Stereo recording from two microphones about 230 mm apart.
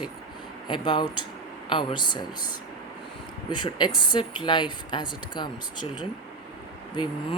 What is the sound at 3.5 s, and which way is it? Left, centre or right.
Speech, centre.